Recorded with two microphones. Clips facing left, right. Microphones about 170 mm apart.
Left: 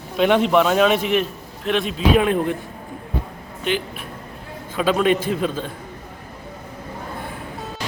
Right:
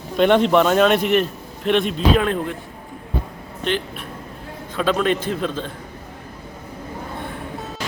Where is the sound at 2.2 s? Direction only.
15° left (ahead or behind).